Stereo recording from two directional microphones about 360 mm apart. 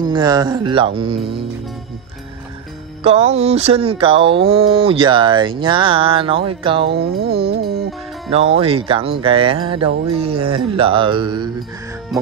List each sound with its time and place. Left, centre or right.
0.0 s speech: centre
3.0 s speech: centre
7.1 s music: right
7.8 s speech: centre